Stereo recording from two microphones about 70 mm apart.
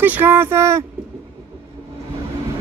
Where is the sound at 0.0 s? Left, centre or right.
Right.